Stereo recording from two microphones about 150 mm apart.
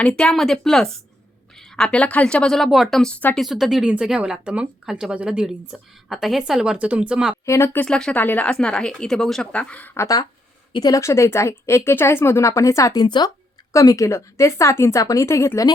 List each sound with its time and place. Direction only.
0.0 s speech: 5° left (ahead or behind)
3.4 s speech: centre (ahead or behind)
7.4 s a woman's voice: 20° left (ahead or behind)